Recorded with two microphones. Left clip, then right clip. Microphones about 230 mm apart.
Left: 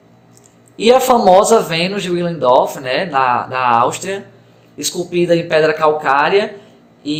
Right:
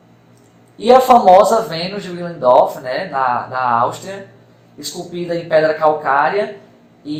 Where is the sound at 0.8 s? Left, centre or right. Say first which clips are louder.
Right 1 dB; left.